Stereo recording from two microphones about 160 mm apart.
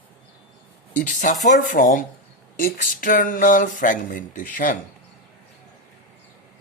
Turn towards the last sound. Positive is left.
turn(degrees=55)  # may be behind; listen again after turning